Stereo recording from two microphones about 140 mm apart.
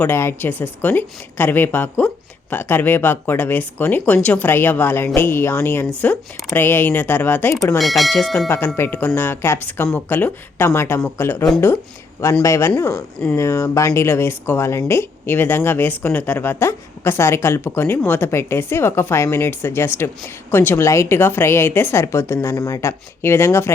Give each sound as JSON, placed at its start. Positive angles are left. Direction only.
{"t": 0.0, "sound": "speech", "side_deg": 15}
{"t": 7.8, "sound": "speech", "side_deg": 0}
{"t": 8.4, "sound": "a woman's voice", "side_deg": 15}